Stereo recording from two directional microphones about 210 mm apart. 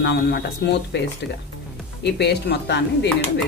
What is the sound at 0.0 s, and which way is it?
Speech, 50° left (ahead or behind).